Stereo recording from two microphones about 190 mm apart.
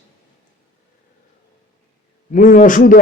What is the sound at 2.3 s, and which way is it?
Speech, 45° left (ahead or behind).